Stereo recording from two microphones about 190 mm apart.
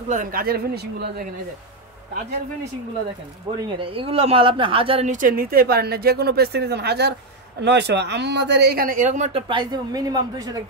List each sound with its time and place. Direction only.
0.1 s speech: 45° right (ahead or behind)
3.8 s speech: 30° right (ahead or behind)